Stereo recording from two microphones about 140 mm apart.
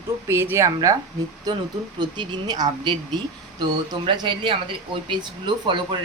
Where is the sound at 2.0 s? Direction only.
30° right (ahead or behind).